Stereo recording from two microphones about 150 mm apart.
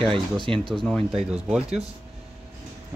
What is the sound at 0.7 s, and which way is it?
Speech, centre (ahead or behind).